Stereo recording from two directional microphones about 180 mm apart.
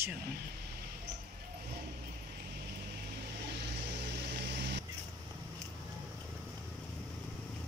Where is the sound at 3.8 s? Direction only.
70° right (ahead or behind).